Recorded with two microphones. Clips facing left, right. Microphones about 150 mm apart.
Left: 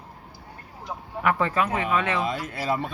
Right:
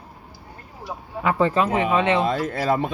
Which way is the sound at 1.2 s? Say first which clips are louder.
Right 4 dB; 30° right (ahead or behind).